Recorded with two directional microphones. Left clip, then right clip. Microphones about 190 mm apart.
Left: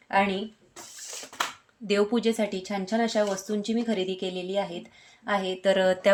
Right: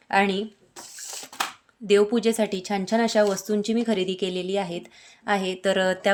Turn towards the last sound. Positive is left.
turn(degrees=-20)  # may be behind; listen again after turning